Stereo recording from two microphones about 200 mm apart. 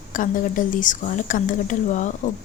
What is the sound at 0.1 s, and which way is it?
Speech, 40° left (ahead or behind).